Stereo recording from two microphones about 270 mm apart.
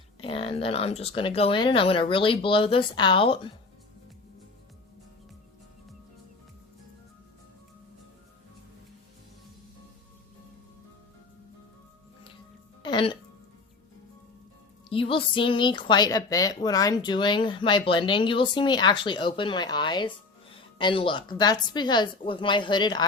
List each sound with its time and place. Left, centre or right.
0.2 s speech: centre
12.8 s music: centre
14.8 s a woman's voice: centre